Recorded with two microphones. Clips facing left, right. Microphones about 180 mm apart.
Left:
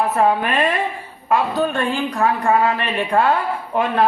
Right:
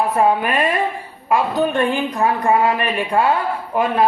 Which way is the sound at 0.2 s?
10° right (ahead or behind).